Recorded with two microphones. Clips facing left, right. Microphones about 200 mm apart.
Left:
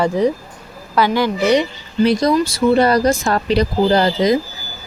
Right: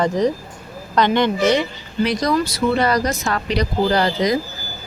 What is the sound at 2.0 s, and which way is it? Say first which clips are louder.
Speech: left 5 dB; 25° left (ahead or behind).